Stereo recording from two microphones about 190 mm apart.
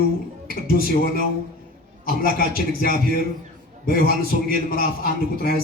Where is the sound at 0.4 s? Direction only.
50° left (ahead or behind).